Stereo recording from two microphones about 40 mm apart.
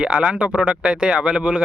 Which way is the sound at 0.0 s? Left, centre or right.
Right.